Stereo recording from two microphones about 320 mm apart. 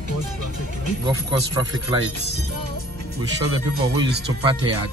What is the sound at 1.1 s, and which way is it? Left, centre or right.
Speech, centre.